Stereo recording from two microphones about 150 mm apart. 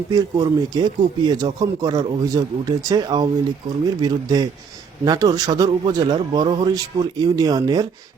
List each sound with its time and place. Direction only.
0.1 s speech: 25° right (ahead or behind)